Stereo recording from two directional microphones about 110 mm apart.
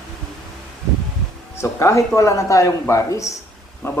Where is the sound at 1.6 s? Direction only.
25° left (ahead or behind).